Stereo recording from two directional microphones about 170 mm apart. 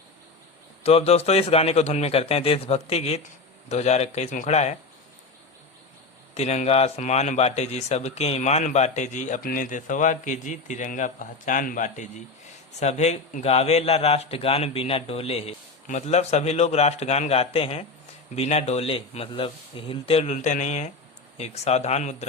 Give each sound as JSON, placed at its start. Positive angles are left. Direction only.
{"t": 0.8, "sound": "a man's voice", "side_deg": 35}
{"t": 6.3, "sound": "a man's voice", "side_deg": 40}